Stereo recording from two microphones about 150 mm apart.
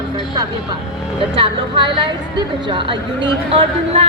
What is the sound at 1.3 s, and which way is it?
A woman's voice, 35° right (ahead or behind).